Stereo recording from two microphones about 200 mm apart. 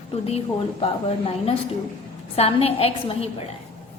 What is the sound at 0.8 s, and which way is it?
A woman's voice, 30° left (ahead or behind).